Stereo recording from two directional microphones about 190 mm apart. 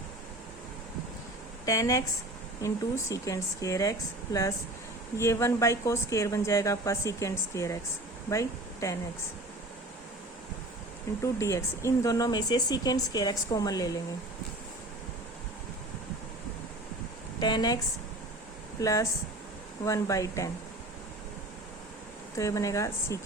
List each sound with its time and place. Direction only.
1.6 s a woman's voice: 15° left (ahead or behind)
3.1 s a woman's voice: 15° left (ahead or behind)
11.2 s speech: 15° left (ahead or behind)
17.4 s speech: 20° left (ahead or behind)
18.8 s a woman's voice: 15° left (ahead or behind)
22.4 s a woman's voice: 15° left (ahead or behind)